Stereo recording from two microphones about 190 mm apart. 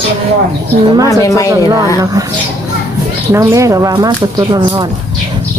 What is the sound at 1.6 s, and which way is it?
Speech, 20° right (ahead or behind).